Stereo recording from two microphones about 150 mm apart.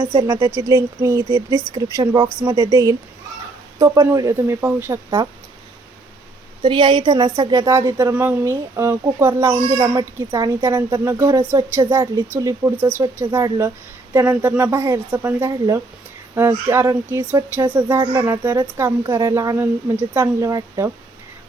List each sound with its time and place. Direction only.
0.0 s speech: 25° right (ahead or behind)
6.7 s a woman's voice: 30° right (ahead or behind)
9.4 s a woman's voice: 30° right (ahead or behind); by 15.4 s 15° right (ahead or behind)
15.4 s a woman's voice: 25° right (ahead or behind)
20.2 s speech: 25° right (ahead or behind)